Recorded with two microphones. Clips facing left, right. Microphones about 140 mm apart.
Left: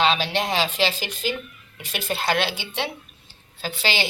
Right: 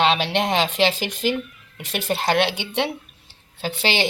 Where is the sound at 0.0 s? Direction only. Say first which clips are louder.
Right 2 dB; 65° right (ahead or behind).